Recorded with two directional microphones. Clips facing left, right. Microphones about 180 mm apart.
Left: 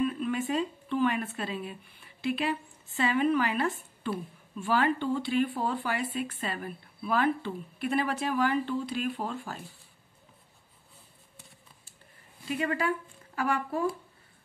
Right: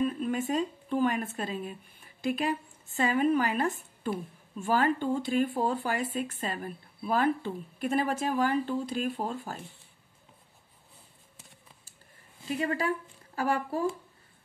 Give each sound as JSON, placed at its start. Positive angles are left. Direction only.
{"t": 0.0, "sound": "speech", "side_deg": -40}
{"t": 12.4, "sound": "speech", "side_deg": -35}